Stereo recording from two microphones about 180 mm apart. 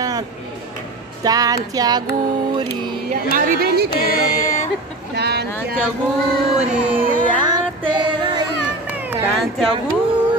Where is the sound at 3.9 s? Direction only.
55° left (ahead or behind).